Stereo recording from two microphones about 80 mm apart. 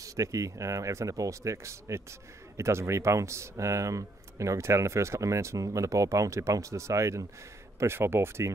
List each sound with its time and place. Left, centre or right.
0.0 s speech: right